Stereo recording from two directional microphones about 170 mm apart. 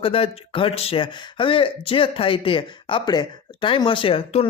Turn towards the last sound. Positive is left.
turn(degrees=35)  # may be behind; listen again after turning